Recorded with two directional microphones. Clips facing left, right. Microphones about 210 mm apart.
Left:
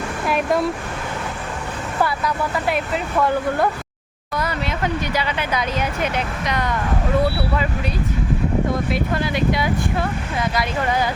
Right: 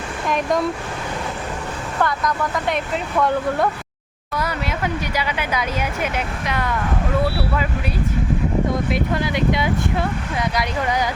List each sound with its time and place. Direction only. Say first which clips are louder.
0.3 s speech: even; 5° left (ahead or behind)
2.0 s speech: even; 10° left (ahead or behind)
5.1 s speech: left 1 dB; 10° right (ahead or behind)
8.9 s speech: even; 20° right (ahead or behind)